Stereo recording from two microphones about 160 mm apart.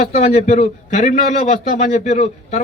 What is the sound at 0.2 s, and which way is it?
Speech, 45° left (ahead or behind).